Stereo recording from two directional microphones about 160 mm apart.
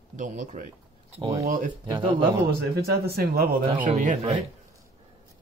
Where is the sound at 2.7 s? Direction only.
75° right (ahead or behind).